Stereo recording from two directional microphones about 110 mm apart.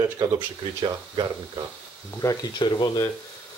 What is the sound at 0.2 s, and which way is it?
Speech, 35° right (ahead or behind).